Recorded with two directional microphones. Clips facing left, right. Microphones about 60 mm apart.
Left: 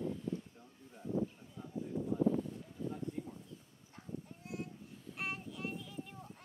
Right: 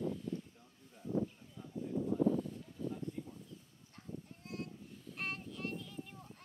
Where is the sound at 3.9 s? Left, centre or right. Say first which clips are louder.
Left 2 dB; centre.